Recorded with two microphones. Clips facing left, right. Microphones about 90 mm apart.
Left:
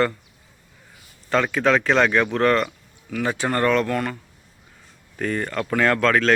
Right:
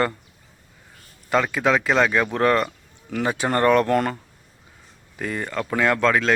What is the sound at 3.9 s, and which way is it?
Speech, 35° right (ahead or behind).